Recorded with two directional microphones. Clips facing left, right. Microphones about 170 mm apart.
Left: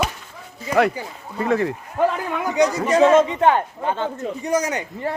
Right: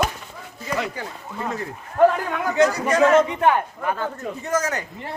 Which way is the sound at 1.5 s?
70° left (ahead or behind).